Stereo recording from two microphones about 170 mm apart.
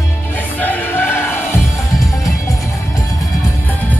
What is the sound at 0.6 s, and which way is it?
Music, 10° left (ahead or behind).